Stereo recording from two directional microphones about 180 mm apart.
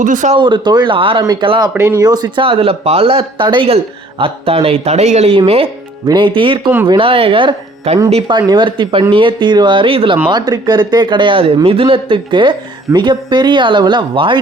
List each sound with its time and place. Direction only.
0.0 s speech: 45° right (ahead or behind)
0.3 s speech: 25° right (ahead or behind)
1.7 s speech: 15° right (ahead or behind); by 5.4 s 35° right (ahead or behind)
6.1 s speech: 25° right (ahead or behind)